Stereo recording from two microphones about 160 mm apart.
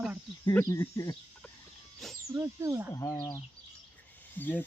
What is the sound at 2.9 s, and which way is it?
Speech, 20° left (ahead or behind).